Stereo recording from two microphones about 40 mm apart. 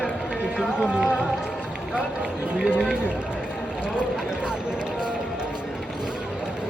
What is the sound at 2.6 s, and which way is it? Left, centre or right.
Speech, right.